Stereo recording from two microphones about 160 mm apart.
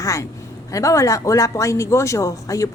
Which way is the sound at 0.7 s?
20° left (ahead or behind).